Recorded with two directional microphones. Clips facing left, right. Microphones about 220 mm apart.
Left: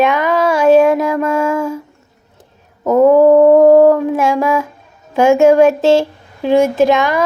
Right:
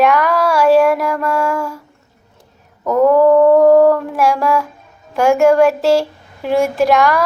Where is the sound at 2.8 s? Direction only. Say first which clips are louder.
Left 3 dB; 20° left (ahead or behind).